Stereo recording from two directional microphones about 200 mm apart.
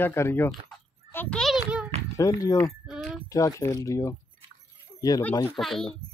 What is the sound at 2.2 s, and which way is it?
Speech, 15° left (ahead or behind).